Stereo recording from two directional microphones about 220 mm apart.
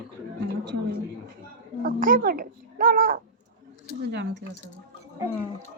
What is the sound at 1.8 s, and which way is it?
A child's voice, 40° right (ahead or behind).